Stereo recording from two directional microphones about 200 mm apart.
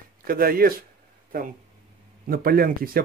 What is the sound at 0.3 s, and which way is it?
Speech, 50° right (ahead or behind).